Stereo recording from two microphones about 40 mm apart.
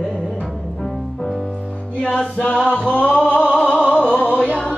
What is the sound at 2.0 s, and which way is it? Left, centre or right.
Music, left.